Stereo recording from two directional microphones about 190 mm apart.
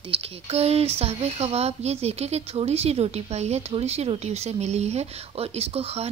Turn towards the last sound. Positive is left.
turn(degrees=-35)  # may be behind; listen again after turning